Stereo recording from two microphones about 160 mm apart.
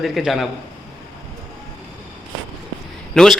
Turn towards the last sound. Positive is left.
turn(degrees=5)  # may be behind; listen again after turning